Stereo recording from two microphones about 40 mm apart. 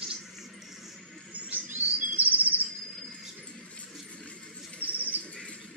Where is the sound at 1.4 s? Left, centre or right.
Right.